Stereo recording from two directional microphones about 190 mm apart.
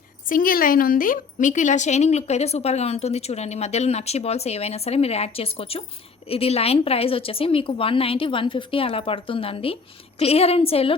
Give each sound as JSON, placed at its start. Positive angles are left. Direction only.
{"t": 0.3, "sound": "a woman's voice", "side_deg": 45}